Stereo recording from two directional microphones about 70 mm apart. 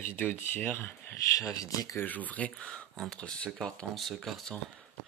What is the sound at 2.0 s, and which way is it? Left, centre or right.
Speech, left.